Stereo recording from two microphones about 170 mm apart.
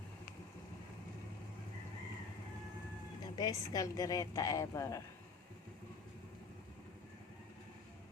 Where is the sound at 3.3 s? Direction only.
25° left (ahead or behind).